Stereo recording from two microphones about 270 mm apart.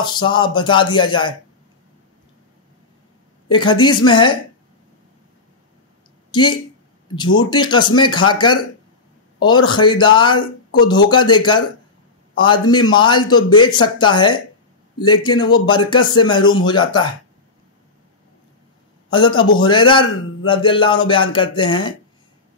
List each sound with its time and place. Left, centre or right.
0.0 s a man's voice: centre
3.4 s a man's voice: centre
6.3 s a man's voice: centre
19.0 s a man's voice: centre